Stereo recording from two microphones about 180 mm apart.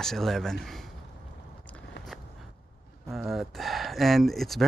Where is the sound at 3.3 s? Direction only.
Centre (ahead or behind).